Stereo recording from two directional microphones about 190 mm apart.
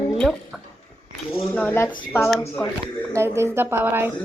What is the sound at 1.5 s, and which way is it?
Speech, 10° left (ahead or behind).